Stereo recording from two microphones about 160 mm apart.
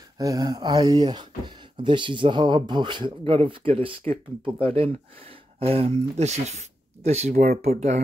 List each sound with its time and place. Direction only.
0.2 s speech: 20° right (ahead or behind); by 7.4 s 45° right (ahead or behind)
7.4 s speech: 70° right (ahead or behind)